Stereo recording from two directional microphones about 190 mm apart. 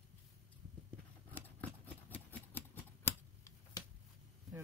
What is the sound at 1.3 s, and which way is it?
Typewriter, 10° left (ahead or behind).